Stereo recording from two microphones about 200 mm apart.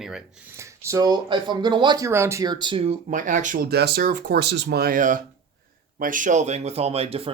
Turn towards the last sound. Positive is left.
turn(degrees=-30)  # may be behind; listen again after turning